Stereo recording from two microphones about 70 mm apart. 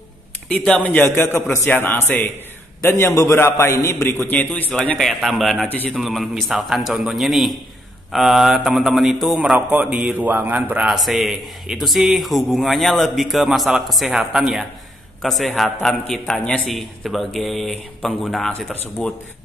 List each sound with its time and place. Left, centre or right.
0.6 s speech: centre
0.8 s a man's voice: left
1.1 s a man's voice: left
5.2 s a man's voice: centre
9.5 s a man's voice: centre
10.9 s a man's voice: centre